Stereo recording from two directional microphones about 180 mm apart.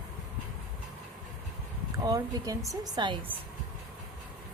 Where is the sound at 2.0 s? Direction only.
20° right (ahead or behind).